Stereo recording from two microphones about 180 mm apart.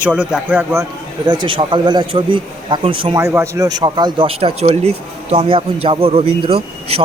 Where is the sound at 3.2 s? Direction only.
15° right (ahead or behind).